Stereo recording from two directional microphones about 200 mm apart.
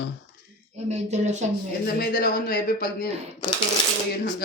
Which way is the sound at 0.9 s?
35° right (ahead or behind).